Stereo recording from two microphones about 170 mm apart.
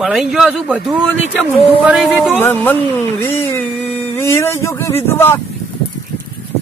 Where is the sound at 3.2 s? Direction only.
15° left (ahead or behind).